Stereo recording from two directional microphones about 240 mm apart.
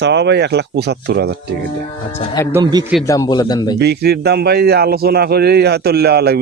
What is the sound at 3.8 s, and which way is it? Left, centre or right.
A man's voice, right.